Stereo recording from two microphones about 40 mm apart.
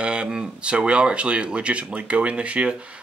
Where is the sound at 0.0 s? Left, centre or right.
Right.